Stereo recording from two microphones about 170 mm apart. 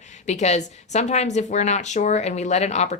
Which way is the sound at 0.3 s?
40° left (ahead or behind).